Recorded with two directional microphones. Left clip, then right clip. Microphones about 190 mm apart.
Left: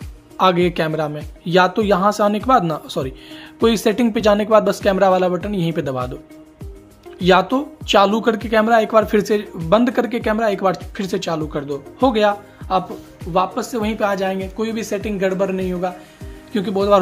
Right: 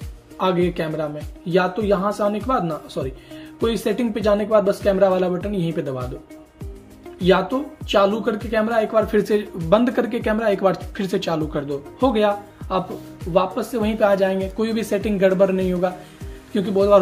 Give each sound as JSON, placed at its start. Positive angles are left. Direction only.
{"t": 0.4, "sound": "speech", "side_deg": 35}
{"t": 7.2, "sound": "speech", "side_deg": 35}
{"t": 16.5, "sound": "speech", "side_deg": 25}